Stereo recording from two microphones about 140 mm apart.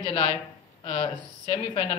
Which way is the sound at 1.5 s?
45° left (ahead or behind).